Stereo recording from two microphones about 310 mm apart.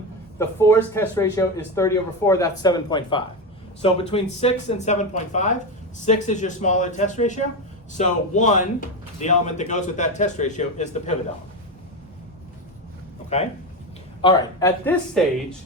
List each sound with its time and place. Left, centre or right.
0.3 s speech: centre
13.3 s speech: left; by 15.5 s centre